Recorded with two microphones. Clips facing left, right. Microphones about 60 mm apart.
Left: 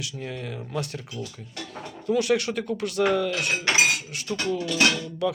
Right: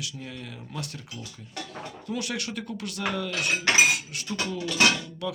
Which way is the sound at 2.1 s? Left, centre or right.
Left.